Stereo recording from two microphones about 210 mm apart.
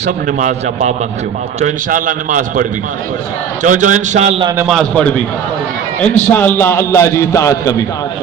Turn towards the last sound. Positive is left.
turn(degrees=15)  # may be behind; listen again after turning